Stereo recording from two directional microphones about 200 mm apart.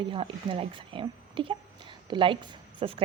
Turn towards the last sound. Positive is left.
turn(degrees=-25)  # may be behind; listen again after turning